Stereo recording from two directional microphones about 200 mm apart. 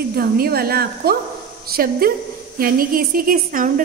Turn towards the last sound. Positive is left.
turn(degrees=-40)  # may be behind; listen again after turning